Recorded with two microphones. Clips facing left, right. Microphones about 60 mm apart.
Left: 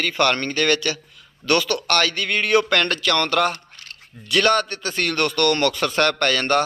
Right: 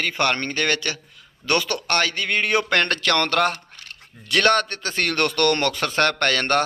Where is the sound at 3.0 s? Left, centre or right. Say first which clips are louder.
Even; right.